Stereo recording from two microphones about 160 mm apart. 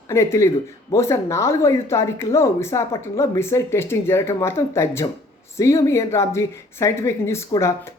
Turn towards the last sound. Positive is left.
turn(degrees=15)  # may be behind; listen again after turning